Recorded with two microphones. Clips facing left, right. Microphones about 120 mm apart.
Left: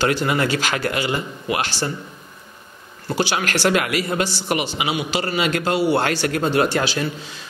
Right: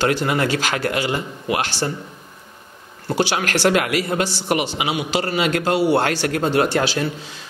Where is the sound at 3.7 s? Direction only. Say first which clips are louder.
Right 2 dB; 50° right (ahead or behind).